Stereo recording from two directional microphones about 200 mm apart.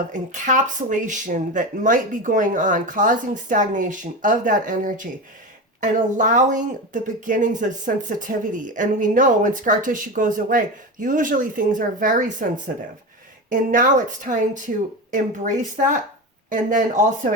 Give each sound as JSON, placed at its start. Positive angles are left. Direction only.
{"t": 0.1, "sound": "speech", "side_deg": -40}